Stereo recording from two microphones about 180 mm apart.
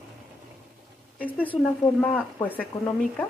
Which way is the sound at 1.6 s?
5° left (ahead or behind).